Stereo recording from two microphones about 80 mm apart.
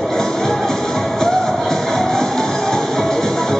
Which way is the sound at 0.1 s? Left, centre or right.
Centre.